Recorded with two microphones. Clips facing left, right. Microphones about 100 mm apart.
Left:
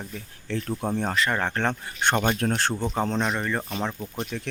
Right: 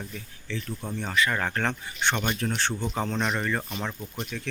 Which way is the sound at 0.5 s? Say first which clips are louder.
Left 6 dB; 45° left (ahead or behind).